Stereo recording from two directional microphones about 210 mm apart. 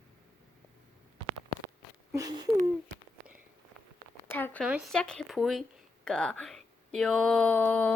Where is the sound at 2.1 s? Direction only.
20° right (ahead or behind).